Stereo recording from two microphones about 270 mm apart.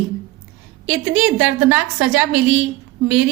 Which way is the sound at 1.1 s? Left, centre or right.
Right.